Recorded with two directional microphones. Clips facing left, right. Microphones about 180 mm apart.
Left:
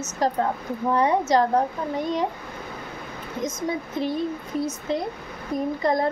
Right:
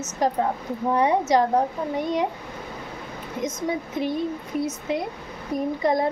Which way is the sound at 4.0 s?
15° right (ahead or behind).